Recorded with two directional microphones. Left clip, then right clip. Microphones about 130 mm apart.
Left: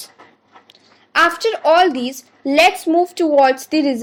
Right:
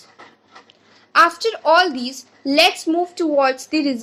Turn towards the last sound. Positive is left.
turn(degrees=40)  # may be behind; listen again after turning